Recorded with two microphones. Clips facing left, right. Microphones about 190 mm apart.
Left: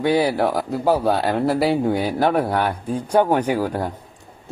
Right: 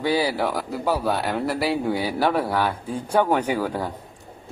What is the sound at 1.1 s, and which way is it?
Speech, 70° left (ahead or behind).